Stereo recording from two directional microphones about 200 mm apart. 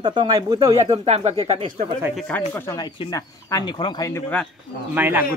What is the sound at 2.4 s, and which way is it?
Speech, 15° left (ahead or behind).